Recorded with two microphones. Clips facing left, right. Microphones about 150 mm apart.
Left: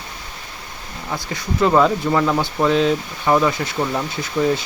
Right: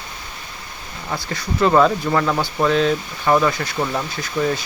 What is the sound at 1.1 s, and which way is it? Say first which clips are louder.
Speech: left 1 dB; 20° left (ahead or behind).